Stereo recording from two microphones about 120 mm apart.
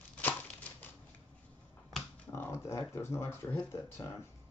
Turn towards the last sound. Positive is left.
turn(degrees=20)  # may be behind; listen again after turning